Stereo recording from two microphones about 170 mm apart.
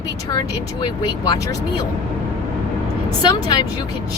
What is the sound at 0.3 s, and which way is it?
Speech, 25° left (ahead or behind).